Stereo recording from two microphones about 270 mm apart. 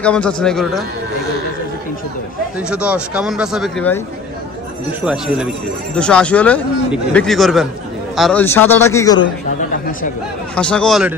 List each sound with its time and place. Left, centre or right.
0.0 s speech: centre
2.7 s speech: centre
5.0 s a man's voice: centre
10.5 s speech: centre